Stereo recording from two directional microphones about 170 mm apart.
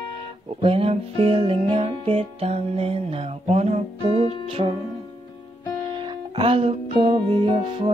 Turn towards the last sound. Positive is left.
turn(degrees=-30)  # may be behind; listen again after turning